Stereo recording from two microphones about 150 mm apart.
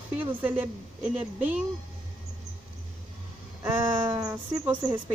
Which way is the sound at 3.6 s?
20° right (ahead or behind).